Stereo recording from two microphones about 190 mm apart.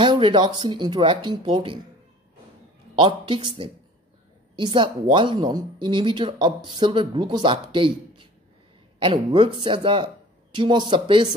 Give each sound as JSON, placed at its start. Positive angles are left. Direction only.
{"t": 0.0, "sound": "a woman's voice", "side_deg": -25}
{"t": 3.0, "sound": "a woman's voice", "side_deg": -25}